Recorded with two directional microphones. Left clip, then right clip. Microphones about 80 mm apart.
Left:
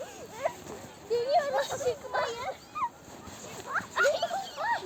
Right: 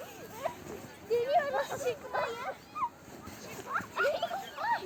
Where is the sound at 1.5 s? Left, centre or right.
Left.